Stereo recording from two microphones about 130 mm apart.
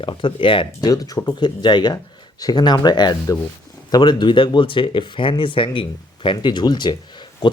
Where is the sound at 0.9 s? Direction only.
25° left (ahead or behind).